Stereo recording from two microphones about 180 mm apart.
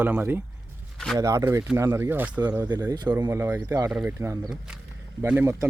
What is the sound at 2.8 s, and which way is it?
Speech, 20° right (ahead or behind).